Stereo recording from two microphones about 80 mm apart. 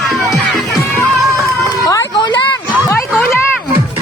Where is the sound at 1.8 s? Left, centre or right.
Left.